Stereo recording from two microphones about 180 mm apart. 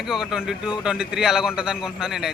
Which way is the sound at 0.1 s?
5° right (ahead or behind).